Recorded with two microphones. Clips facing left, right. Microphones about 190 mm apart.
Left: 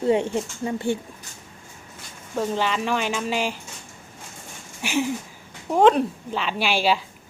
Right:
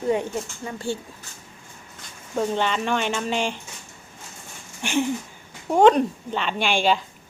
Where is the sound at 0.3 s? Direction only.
20° left (ahead or behind).